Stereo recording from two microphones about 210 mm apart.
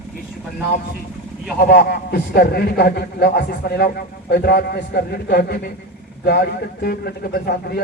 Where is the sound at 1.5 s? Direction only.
50° left (ahead or behind).